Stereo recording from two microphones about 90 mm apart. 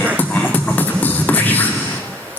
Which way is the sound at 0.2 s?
20° left (ahead or behind).